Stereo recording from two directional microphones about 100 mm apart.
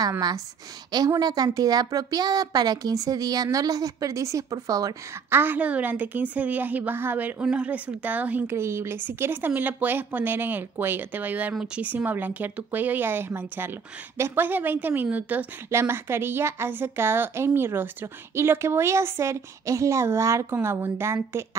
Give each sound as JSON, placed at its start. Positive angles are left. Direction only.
{"t": 1.2, "sound": "speech", "side_deg": -40}
{"t": 5.3, "sound": "a woman's voice", "side_deg": -20}
{"t": 8.5, "sound": "a woman's voice", "side_deg": -25}